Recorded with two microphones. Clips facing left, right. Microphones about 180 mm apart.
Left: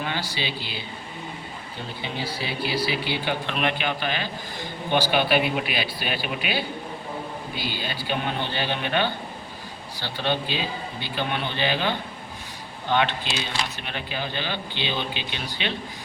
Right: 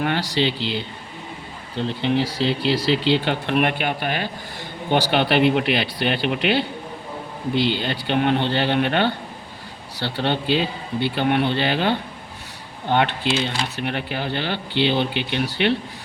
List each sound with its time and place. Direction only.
0.0 s speech: 75° right (ahead or behind)
1.8 s speech: 75° right (ahead or behind); by 4.3 s 55° right (ahead or behind)
4.9 s speech: 70° right (ahead or behind)